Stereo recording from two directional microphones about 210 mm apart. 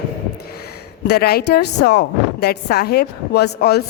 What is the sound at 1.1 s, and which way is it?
A woman's voice, 45° left (ahead or behind).